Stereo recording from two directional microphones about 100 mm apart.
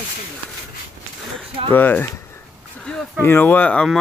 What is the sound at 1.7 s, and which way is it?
Speech, 20° left (ahead or behind).